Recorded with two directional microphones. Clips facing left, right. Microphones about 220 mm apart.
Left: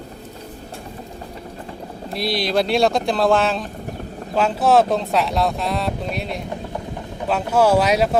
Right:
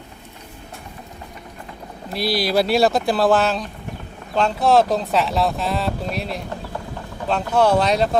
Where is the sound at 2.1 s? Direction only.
5° right (ahead or behind).